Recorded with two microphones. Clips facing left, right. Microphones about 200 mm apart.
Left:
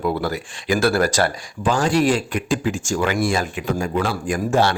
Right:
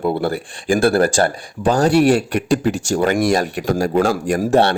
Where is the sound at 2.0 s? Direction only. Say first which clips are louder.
Right 5 dB; 65° right (ahead or behind).